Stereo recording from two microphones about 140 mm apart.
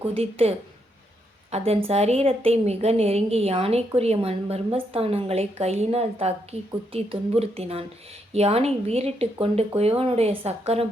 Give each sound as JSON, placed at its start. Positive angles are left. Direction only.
{"t": 0.0, "sound": "a woman's voice", "side_deg": -45}